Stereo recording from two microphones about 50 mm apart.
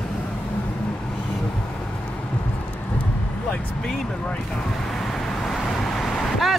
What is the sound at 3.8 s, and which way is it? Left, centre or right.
Speech, centre.